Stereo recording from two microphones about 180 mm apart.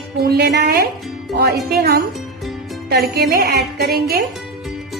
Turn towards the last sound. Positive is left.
turn(degrees=-60)  # may be behind; listen again after turning